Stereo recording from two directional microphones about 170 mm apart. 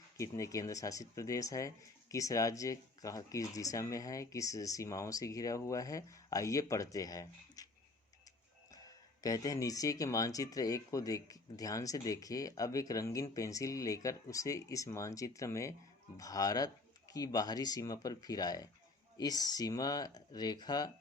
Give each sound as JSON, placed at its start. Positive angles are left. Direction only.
{"t": 0.2, "sound": "speech", "side_deg": 20}
{"t": 9.2, "sound": "speech", "side_deg": 20}